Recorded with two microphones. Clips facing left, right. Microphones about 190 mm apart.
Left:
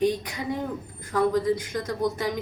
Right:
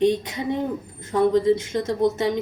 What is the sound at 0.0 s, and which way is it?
Speech, 25° right (ahead or behind).